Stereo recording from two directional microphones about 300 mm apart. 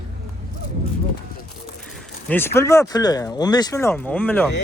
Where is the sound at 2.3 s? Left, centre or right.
Centre.